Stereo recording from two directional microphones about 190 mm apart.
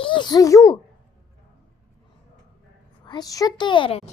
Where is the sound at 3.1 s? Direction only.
20° left (ahead or behind).